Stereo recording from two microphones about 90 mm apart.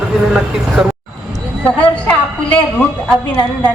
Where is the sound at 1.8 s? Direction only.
15° left (ahead or behind).